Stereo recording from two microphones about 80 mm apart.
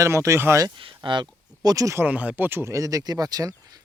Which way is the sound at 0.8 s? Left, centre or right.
Right.